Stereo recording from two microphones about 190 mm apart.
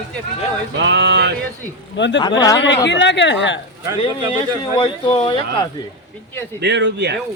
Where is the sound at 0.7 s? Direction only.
65° right (ahead or behind).